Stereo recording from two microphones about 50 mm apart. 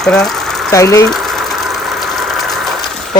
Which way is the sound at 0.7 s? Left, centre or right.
Left.